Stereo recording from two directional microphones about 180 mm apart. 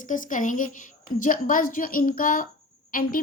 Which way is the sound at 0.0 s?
45° left (ahead or behind).